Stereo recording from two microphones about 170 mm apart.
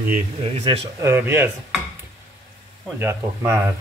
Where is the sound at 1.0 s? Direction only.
10° right (ahead or behind).